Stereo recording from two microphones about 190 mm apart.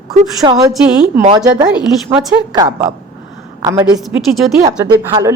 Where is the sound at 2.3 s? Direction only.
20° right (ahead or behind).